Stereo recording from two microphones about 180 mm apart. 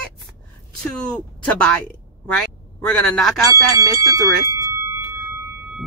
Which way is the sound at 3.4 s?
20° right (ahead or behind).